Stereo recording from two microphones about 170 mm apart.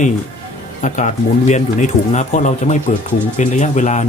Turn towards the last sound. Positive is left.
turn(degrees=45)  # may be behind; listen again after turning